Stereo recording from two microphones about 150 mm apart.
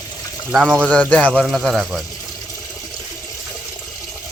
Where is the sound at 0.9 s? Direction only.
10° left (ahead or behind).